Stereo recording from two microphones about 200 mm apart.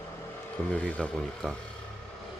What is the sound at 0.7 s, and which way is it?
Speech, 5° left (ahead or behind).